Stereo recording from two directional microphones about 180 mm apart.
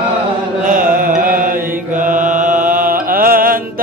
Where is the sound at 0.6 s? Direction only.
50° right (ahead or behind).